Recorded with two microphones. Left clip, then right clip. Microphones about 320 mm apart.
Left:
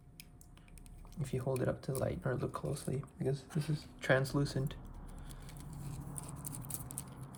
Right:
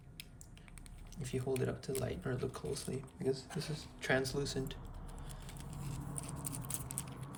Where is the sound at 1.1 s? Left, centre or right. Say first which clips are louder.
Even; centre.